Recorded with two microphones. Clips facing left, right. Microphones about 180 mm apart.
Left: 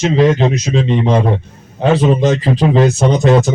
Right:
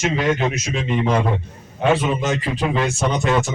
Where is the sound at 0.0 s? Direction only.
30° left (ahead or behind).